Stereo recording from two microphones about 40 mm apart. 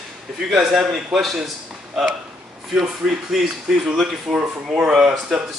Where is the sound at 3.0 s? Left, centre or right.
Right.